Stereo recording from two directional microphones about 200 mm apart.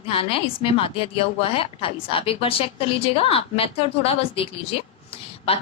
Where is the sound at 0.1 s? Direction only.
25° left (ahead or behind).